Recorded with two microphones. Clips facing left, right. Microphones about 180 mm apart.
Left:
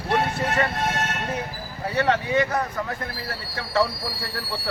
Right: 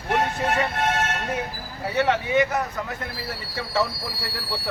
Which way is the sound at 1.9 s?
15° right (ahead or behind).